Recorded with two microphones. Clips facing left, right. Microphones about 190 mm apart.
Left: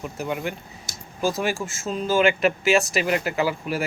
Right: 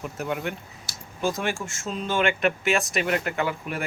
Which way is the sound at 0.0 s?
Centre (ahead or behind).